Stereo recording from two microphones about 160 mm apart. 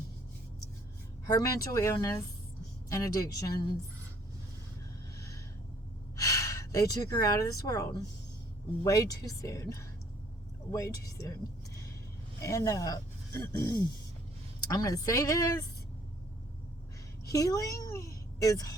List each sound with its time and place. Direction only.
1.3 s speech: 20° left (ahead or behind)
5.1 s snort: 20° left (ahead or behind)
6.1 s speech: 20° left (ahead or behind)
12.4 s speech: 20° left (ahead or behind)
17.2 s a woman's voice: 20° left (ahead or behind)